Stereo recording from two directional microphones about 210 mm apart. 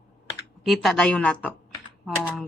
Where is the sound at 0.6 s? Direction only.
Centre (ahead or behind).